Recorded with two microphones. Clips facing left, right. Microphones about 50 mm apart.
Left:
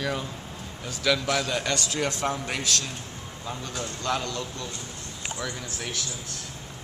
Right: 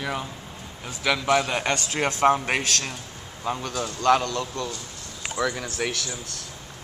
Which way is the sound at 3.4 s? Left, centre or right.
Right.